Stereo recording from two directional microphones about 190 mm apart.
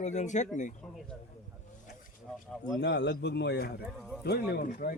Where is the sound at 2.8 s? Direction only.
65° left (ahead or behind); by 4.9 s 45° left (ahead or behind).